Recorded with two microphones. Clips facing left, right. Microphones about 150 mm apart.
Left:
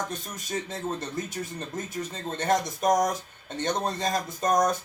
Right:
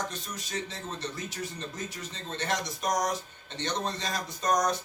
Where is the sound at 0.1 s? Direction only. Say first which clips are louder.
Left 4 dB; 50° left (ahead or behind).